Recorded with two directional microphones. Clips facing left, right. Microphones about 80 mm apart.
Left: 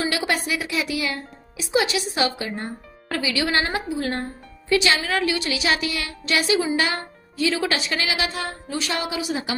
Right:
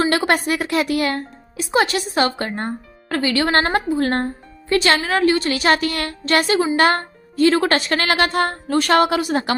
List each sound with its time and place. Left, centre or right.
0.0 s a woman's voice: right